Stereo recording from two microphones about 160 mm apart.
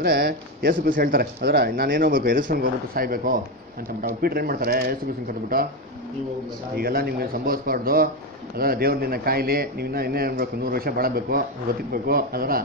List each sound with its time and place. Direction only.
0.0 s speech: 70° right (ahead or behind)
6.8 s speech: 70° right (ahead or behind)